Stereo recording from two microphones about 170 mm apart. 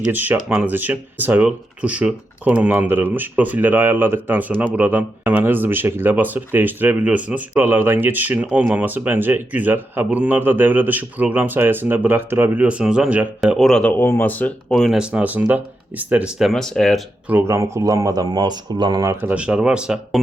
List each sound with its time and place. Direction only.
0.1 s speech: 10° right (ahead or behind)
17.2 s speech: 15° right (ahead or behind)
19.1 s speech: 10° right (ahead or behind)